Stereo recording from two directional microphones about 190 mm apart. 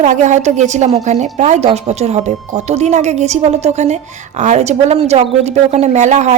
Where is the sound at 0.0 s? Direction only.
40° right (ahead or behind).